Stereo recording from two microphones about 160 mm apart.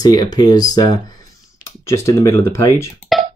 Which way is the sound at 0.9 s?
25° left (ahead or behind).